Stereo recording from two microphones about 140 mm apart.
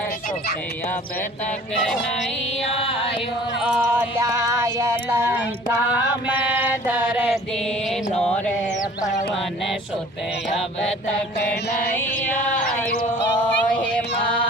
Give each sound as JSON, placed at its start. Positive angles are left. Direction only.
{"t": 3.6, "sound": "music", "side_deg": -10}
{"t": 4.3, "sound": "female singing", "side_deg": -20}
{"t": 6.2, "sound": "a sound", "side_deg": -10}
{"t": 7.9, "sound": "mantra", "side_deg": 5}
{"t": 11.9, "sound": "music", "side_deg": 10}